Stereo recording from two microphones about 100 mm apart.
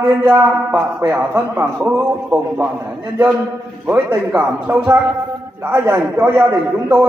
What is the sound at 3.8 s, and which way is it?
A man's voice, 20° right (ahead or behind).